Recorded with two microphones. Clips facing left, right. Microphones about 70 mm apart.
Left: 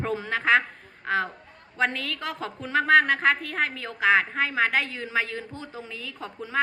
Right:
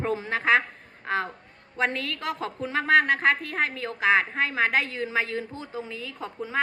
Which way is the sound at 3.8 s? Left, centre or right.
Right.